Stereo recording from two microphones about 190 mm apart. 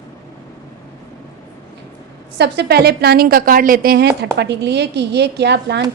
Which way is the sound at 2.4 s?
60° right (ahead or behind).